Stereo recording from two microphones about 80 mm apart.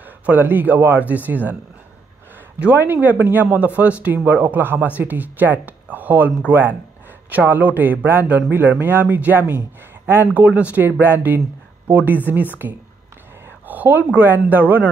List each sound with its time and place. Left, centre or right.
0.3 s speech: right
2.6 s speech: right
10.3 s speech: centre